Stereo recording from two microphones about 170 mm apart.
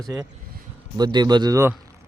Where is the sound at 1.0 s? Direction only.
25° right (ahead or behind).